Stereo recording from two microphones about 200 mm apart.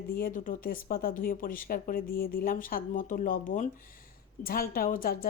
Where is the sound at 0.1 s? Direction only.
45° left (ahead or behind).